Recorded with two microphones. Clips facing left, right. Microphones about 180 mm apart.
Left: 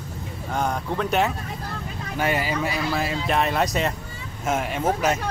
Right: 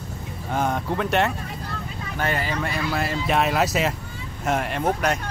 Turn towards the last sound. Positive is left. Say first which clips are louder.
# left 1 dB
turn(degrees=5)  # may be behind; listen again after turning